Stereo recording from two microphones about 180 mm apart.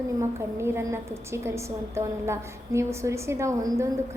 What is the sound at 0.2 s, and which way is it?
A woman's voice, 15° right (ahead or behind).